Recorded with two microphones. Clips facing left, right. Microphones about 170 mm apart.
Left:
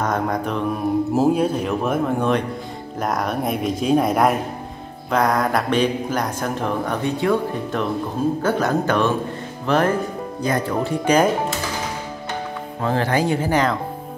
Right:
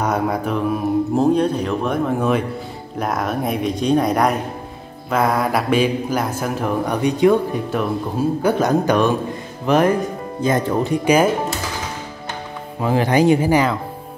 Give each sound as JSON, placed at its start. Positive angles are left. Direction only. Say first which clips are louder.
{"t": 0.0, "sound": "mantra", "louder": "right 2 dB", "side_deg": -10}
{"t": 1.1, "sound": "speech", "louder": "right 2 dB", "side_deg": 5}
{"t": 12.8, "sound": "speech", "louder": "right 5 dB", "side_deg": -15}